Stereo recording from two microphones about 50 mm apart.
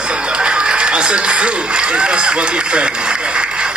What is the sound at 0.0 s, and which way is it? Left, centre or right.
Speech, centre.